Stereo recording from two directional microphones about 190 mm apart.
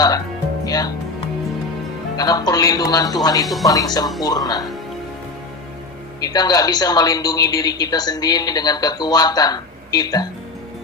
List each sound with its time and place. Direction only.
0.6 s music: 20° left (ahead or behind)
2.1 s a woman's voice: 20° left (ahead or behind)
3.4 s speech: centre (ahead or behind)
3.7 s a woman's voice: 20° left (ahead or behind)
6.2 s a woman's voice: 20° left (ahead or behind)